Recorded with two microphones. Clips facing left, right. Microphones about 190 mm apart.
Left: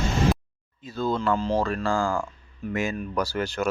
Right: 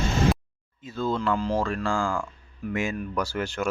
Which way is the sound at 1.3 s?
25° left (ahead or behind).